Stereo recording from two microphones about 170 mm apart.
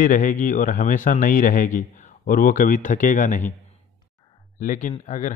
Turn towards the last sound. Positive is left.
turn(degrees=50)  # may be behind; listen again after turning